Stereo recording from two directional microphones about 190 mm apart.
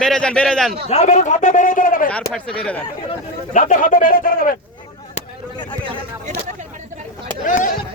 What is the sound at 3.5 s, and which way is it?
Speech, 45° left (ahead or behind).